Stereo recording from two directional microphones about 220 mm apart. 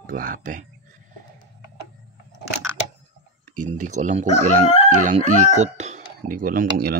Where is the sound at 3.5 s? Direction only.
35° right (ahead or behind).